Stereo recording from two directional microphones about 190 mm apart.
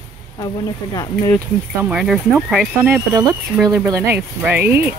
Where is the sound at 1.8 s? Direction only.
5° right (ahead or behind).